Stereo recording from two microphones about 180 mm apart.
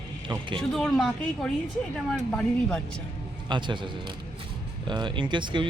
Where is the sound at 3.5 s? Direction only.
25° right (ahead or behind).